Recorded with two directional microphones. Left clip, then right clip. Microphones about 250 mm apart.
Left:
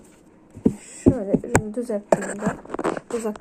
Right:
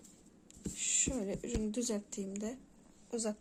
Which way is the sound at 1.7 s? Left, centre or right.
Right.